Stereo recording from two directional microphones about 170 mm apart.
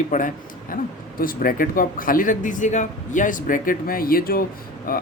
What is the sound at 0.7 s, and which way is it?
Speech, 55° left (ahead or behind).